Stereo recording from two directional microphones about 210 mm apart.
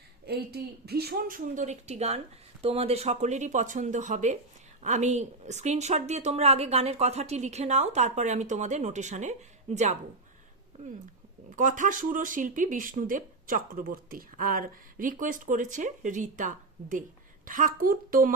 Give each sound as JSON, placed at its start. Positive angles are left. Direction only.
{"t": 0.3, "sound": "speech", "side_deg": -50}
{"t": 11.5, "sound": "speech", "side_deg": -40}